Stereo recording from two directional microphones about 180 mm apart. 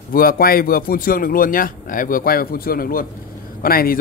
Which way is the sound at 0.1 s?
55° left (ahead or behind).